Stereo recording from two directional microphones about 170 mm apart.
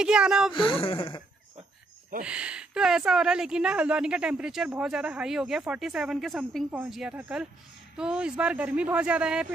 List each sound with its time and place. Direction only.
0.0 s a woman's voice: 5° right (ahead or behind)
0.5 s speech: 30° left (ahead or behind)
2.2 s a woman's voice: 5° right (ahead or behind)